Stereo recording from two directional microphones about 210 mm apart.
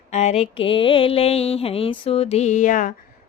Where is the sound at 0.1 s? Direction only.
30° left (ahead or behind).